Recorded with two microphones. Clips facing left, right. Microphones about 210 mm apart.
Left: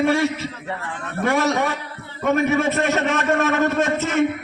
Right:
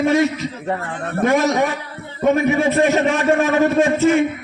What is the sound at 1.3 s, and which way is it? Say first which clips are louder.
A man's voice: right 2 dB; 15° right (ahead or behind).